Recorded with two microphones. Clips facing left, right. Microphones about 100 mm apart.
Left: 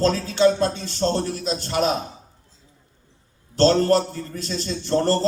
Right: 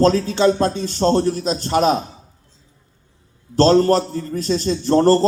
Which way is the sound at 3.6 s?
40° right (ahead or behind).